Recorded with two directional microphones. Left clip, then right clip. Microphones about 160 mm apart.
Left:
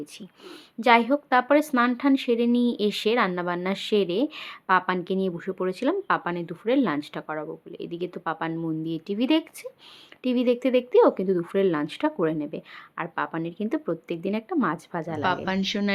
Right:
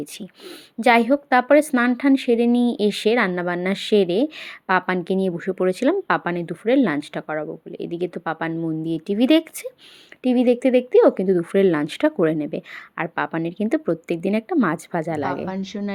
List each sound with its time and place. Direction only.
0.8 s a woman's voice: 25° right (ahead or behind)
15.4 s a woman's voice: 10° right (ahead or behind)